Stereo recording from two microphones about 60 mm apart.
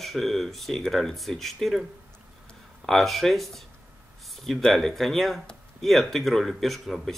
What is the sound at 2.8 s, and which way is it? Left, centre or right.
Speech, centre.